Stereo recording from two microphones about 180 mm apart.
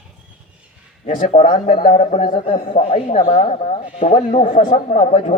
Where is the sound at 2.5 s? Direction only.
30° left (ahead or behind).